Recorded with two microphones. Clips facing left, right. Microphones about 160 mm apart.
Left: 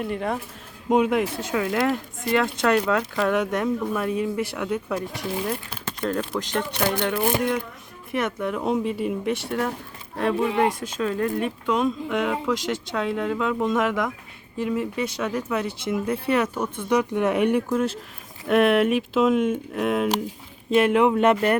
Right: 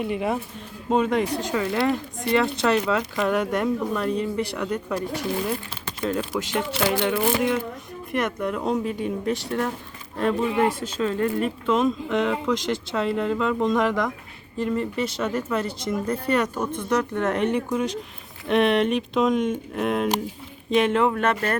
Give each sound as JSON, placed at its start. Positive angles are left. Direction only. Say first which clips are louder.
{"t": 0.0, "sound": "speech", "louder": "right 2 dB", "side_deg": -5}
{"t": 0.9, "sound": "speech", "louder": "left 1 dB", "side_deg": 10}